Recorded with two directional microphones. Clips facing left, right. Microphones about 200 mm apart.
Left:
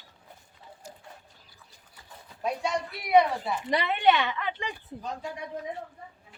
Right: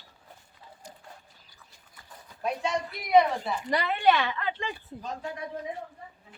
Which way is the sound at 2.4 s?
10° left (ahead or behind).